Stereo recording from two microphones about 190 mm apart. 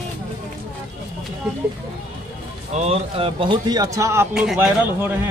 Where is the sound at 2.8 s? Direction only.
30° right (ahead or behind); by 5.2 s 10° right (ahead or behind).